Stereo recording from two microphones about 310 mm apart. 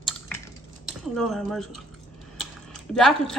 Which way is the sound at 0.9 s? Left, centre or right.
Centre.